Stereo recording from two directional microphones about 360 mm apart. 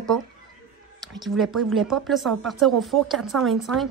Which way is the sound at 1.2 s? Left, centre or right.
Centre.